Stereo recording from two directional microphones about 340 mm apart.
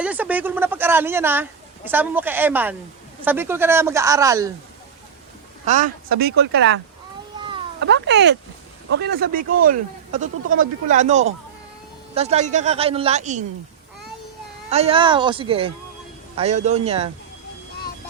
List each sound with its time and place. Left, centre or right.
0.0 s speech: centre
5.6 s speech: right
7.3 s a sound: centre
7.8 s speech: right
14.7 s speech: centre